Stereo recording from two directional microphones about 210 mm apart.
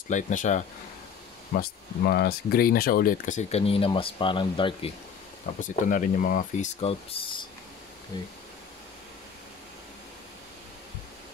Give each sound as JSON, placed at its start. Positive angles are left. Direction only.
{"t": 0.1, "sound": "speech", "side_deg": 35}
{"t": 1.5, "sound": "speech", "side_deg": 50}
{"t": 5.6, "sound": "speech", "side_deg": 40}